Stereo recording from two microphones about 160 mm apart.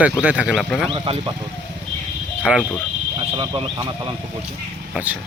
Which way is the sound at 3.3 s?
30° right (ahead or behind).